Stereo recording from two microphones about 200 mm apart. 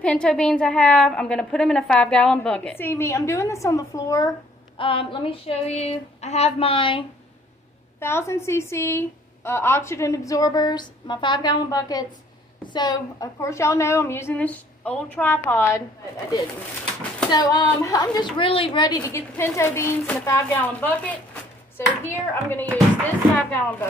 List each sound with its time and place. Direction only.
0.0 s a woman's voice: 5° left (ahead or behind); by 7.1 s 25° left (ahead or behind)
8.0 s a woman's voice: 10° left (ahead or behind)
17.3 s a woman's voice: 20° left (ahead or behind)